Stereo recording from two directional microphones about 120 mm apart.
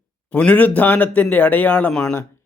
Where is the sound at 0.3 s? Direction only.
10° left (ahead or behind).